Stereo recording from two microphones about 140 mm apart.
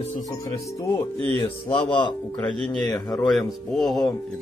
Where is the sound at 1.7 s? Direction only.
35° left (ahead or behind).